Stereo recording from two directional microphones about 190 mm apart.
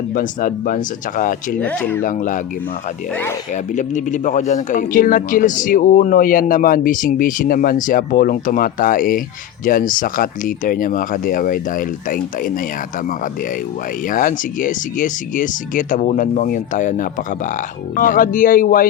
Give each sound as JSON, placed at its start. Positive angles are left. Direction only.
{"t": 0.1, "sound": "speech", "side_deg": 45}
{"t": 1.6, "sound": "speech", "side_deg": 10}
{"t": 2.0, "sound": "speech", "side_deg": 45}
{"t": 3.5, "sound": "speech", "side_deg": 40}
{"t": 14.1, "sound": "speech", "side_deg": 45}